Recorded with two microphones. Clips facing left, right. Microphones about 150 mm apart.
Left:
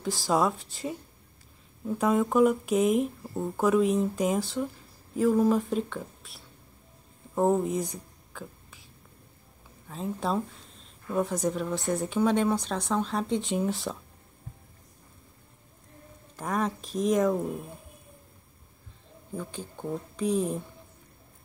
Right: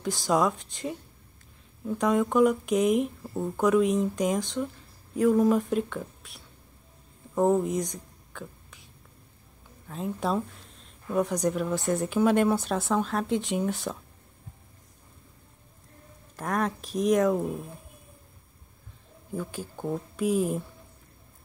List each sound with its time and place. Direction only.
0.0 s speech: centre (ahead or behind)
7.3 s a sound: 5° left (ahead or behind)
9.8 s speech: centre (ahead or behind)
16.3 s speech: centre (ahead or behind)
19.3 s speech: 5° right (ahead or behind)